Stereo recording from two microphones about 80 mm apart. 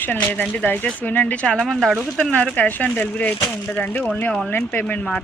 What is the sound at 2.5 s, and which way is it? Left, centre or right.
Speech, centre.